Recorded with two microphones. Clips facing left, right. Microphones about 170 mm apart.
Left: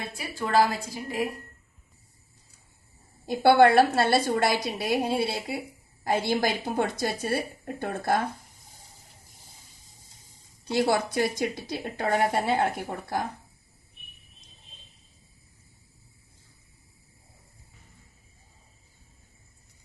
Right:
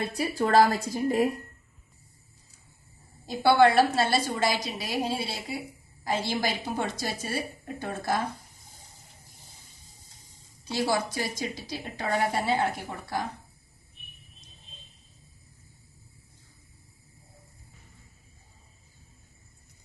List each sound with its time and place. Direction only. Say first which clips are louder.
0.1 s a woman's voice: right 2 dB; 40° right (ahead or behind)
3.2 s a woman's voice: left 2 dB; 55° left (ahead or behind)
10.7 s a woman's voice: left 3 dB; 60° left (ahead or behind)